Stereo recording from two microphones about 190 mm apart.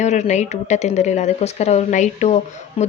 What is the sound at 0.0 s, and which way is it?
Speech, 40° left (ahead or behind).